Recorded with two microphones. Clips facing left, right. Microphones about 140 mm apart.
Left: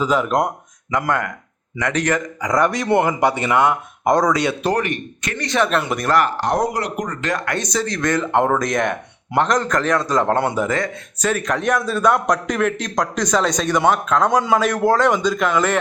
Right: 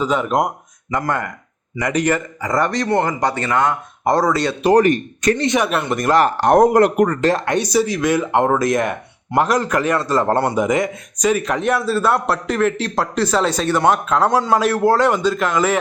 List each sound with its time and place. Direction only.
0.0 s speech: centre (ahead or behind)
4.0 s speech: 5° right (ahead or behind)
4.8 s speech: 40° right (ahead or behind)
5.4 s speech: 20° right (ahead or behind)
5.8 s speech: centre (ahead or behind)
6.2 s speech: 55° right (ahead or behind)
7.2 s speech: 30° right (ahead or behind)
7.6 s speech: 10° right (ahead or behind)
10.7 s a man's voice: 20° right (ahead or behind)